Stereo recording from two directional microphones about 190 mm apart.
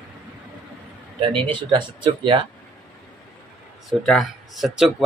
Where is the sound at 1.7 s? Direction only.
25° right (ahead or behind).